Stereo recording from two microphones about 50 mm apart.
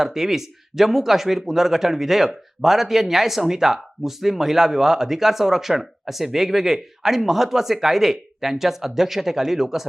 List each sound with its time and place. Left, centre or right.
0.0 s speech: centre